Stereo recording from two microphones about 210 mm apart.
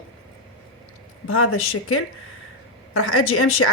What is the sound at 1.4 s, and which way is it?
A woman's voice, 85° left.